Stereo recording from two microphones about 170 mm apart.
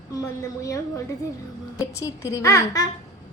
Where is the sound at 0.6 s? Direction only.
20° left (ahead or behind).